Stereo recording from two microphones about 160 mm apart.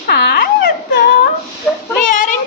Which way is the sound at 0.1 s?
65° left (ahead or behind).